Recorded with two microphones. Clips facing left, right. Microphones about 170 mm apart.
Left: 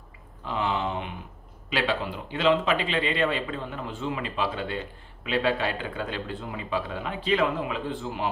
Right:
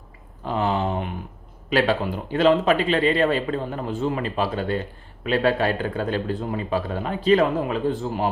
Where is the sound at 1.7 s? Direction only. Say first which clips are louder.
Right 6 dB; 45° right (ahead or behind).